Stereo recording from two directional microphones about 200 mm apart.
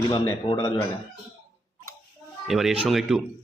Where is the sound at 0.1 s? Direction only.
25° left (ahead or behind).